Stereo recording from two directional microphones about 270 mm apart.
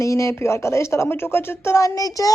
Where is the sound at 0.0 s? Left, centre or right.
Centre.